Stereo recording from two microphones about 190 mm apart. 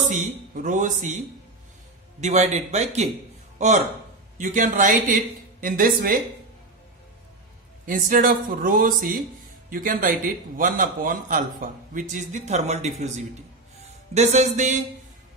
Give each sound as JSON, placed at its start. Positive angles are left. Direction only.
{"t": 0.1, "sound": "a man's voice", "side_deg": -45}
{"t": 7.8, "sound": "a man's voice", "side_deg": -45}
{"t": 14.1, "sound": "a man's voice", "side_deg": -35}